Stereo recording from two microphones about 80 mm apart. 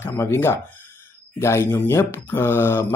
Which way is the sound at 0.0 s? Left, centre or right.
Left.